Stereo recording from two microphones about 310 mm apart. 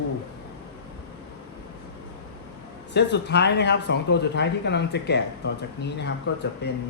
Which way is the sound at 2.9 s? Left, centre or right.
Left.